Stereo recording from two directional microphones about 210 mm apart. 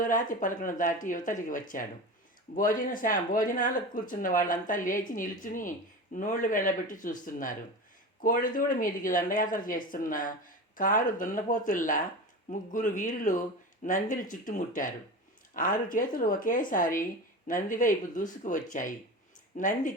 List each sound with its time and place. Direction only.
0.0 s speech: 40° left (ahead or behind)